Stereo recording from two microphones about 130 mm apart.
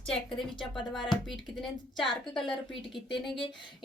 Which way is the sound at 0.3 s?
5° left (ahead or behind).